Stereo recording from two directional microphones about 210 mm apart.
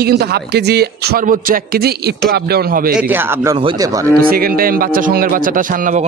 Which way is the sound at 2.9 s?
5° right (ahead or behind).